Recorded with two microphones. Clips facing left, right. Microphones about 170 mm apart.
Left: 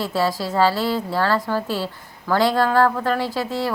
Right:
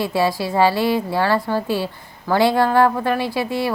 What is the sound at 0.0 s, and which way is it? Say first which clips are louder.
A woman's voice: right 2 dB; 15° right (ahead or behind).